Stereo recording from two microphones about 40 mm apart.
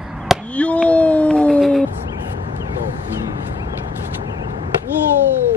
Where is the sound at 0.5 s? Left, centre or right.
Left.